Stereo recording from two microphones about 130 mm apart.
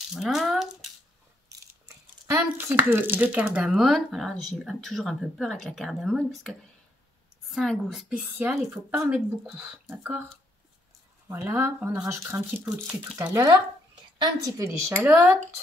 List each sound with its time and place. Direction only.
0.1 s a sound: 5° right (ahead or behind)
2.2 s speech: 15° right (ahead or behind); by 6.5 s 5° left (ahead or behind)
7.5 s speech: centre (ahead or behind)
8.4 s speech: 15° right (ahead or behind)
11.4 s speech: 15° right (ahead or behind)